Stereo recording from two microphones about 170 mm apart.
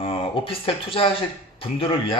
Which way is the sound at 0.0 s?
35° left (ahead or behind).